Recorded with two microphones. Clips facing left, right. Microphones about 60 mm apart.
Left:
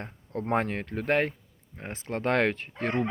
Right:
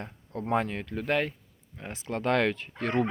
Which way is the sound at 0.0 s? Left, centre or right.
Left.